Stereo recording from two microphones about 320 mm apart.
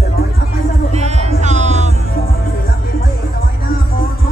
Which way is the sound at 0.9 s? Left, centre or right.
Centre.